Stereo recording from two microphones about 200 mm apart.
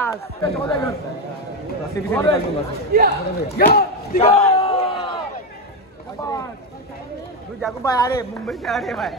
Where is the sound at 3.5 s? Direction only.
50° left (ahead or behind).